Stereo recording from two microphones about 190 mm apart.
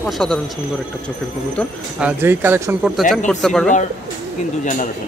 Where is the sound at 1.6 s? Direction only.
5° left (ahead or behind).